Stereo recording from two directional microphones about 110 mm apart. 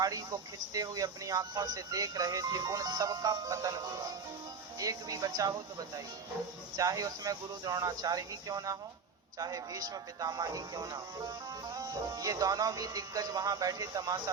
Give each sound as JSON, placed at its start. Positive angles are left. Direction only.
{"t": 0.0, "sound": "speech", "side_deg": -35}
{"t": 6.7, "sound": "speech", "side_deg": -35}